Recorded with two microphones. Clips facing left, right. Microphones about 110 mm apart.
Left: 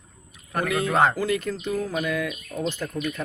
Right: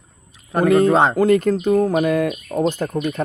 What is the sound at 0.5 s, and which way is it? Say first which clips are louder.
Speech: right 11 dB; 35° right (ahead or behind).